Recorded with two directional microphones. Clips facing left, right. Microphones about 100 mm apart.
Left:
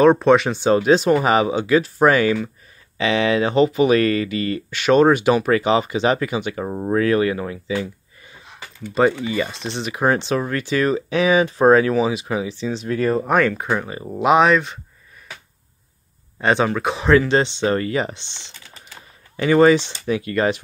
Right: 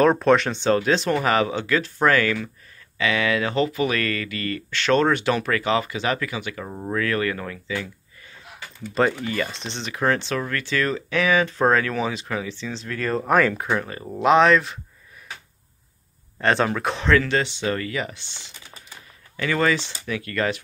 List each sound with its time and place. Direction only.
0.0 s speech: centre (ahead or behind); by 7.9 s 20° left (ahead or behind)
9.2 s speech: 10° left (ahead or behind)
13.2 s speech: centre (ahead or behind)
13.7 s speech: 10° left (ahead or behind)
16.3 s speech: 5° left (ahead or behind)
17.1 s speech: 20° left (ahead or behind)